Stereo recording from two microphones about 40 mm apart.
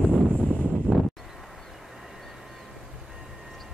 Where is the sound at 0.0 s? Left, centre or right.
Left.